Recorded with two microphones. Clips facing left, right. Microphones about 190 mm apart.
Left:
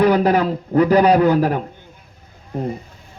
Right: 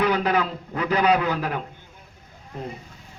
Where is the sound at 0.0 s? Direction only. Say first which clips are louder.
Left 7 dB; 40° left (ahead or behind).